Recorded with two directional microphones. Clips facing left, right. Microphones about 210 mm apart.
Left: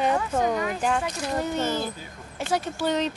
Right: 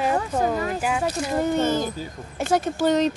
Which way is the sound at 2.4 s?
45° right (ahead or behind).